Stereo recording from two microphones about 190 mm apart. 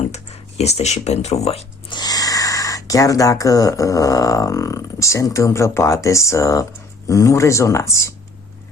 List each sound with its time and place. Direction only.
0.6 s speech: 35° left (ahead or behind); by 8.1 s 15° left (ahead or behind)